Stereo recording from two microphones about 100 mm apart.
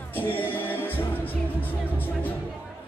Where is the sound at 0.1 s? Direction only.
20° left (ahead or behind).